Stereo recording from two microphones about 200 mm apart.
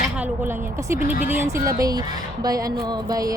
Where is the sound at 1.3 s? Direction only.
10° right (ahead or behind).